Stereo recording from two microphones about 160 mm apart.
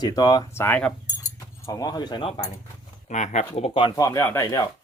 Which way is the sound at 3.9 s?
20° left (ahead or behind).